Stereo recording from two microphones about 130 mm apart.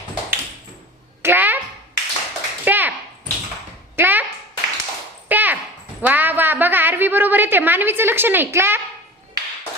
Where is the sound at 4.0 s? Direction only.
15° right (ahead or behind).